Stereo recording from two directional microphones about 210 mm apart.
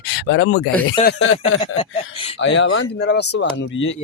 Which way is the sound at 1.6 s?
25° left (ahead or behind).